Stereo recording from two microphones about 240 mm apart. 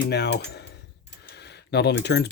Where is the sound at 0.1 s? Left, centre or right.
Left.